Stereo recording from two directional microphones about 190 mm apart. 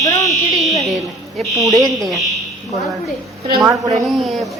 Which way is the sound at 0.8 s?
Centre (ahead or behind).